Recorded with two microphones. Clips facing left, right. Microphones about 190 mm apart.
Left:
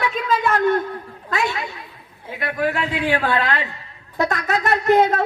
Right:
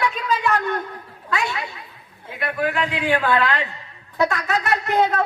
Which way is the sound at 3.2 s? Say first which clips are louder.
Right 1 dB; 40° left (ahead or behind).